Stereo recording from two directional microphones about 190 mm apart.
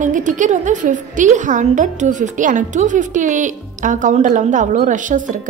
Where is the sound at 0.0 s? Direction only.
40° right (ahead or behind).